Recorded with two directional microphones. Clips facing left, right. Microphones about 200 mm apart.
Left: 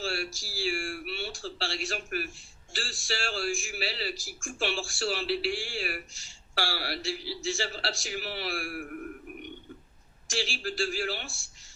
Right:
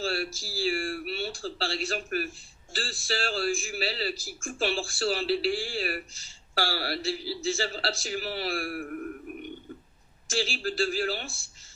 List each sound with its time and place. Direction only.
0.0 s speech: 35° right (ahead or behind)
10.3 s speech: 35° right (ahead or behind)